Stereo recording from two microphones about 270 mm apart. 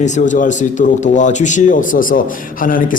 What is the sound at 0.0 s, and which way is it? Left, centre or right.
A man's voice, left.